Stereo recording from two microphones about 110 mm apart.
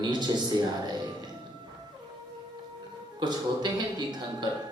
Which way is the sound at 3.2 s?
40° right (ahead or behind).